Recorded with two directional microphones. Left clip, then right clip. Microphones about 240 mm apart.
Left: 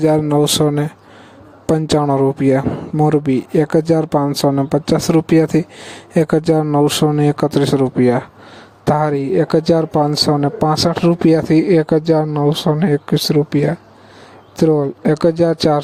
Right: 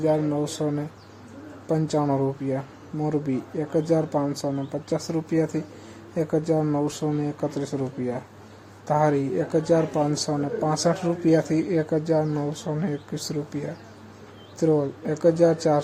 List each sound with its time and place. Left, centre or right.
0.0 s speech: left